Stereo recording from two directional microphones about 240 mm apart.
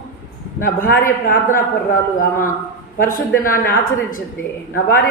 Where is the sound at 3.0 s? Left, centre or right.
Left.